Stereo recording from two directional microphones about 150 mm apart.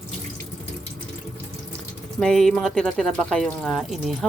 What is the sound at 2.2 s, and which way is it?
Speech, centre (ahead or behind).